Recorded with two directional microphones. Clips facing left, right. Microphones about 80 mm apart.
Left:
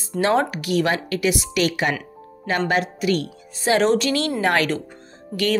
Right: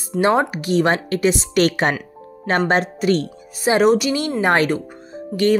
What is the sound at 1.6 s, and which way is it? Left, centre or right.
Speech, right.